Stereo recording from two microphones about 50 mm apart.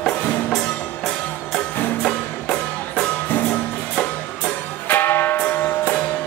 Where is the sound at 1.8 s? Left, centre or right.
Left.